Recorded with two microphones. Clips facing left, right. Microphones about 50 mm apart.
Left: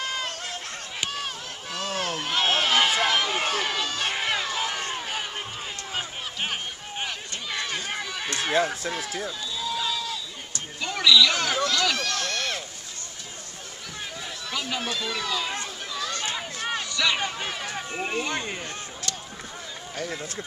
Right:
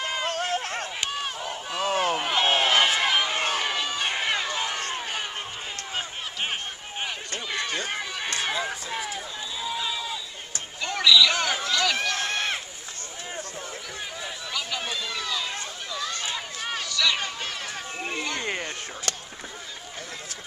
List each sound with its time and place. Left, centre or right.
0.0 s run: centre
0.3 s run: right
1.1 s run: centre
7.5 s run: centre
9.6 s a sound: centre
10.8 s a sound: centre; by 12.5 s right
14.8 s speech: centre
16.2 s run: centre
16.9 s speech: centre